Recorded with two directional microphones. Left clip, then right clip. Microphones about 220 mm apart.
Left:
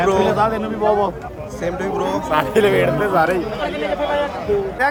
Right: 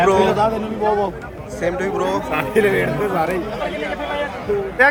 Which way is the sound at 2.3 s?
30° left (ahead or behind).